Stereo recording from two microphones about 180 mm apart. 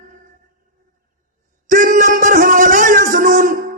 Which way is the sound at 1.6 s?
45° right (ahead or behind).